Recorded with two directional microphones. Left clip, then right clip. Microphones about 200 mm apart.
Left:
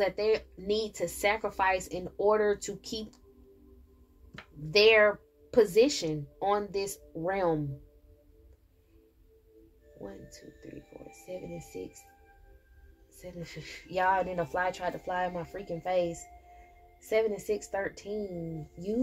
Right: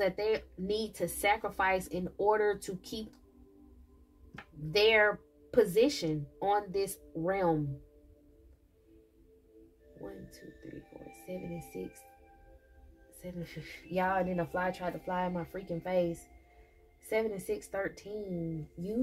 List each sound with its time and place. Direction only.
0.0 s speech: 35° left (ahead or behind)
4.6 s speech: 35° left (ahead or behind)
11.1 s speech: 35° left (ahead or behind)
13.2 s speech: 35° left (ahead or behind)